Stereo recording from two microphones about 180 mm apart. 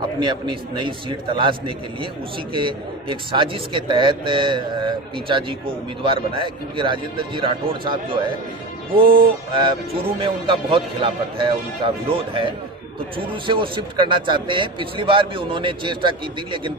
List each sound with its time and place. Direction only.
0.2 s speech: 25° right (ahead or behind)
9.5 s speech: 25° right (ahead or behind)